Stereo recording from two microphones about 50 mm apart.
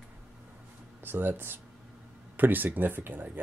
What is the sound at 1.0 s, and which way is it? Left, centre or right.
Speech, right.